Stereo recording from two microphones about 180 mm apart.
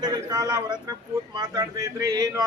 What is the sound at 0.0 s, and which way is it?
A man's voice, 20° right (ahead or behind).